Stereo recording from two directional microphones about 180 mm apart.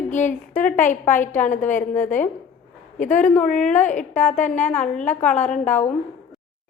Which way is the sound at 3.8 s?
45° left (ahead or behind).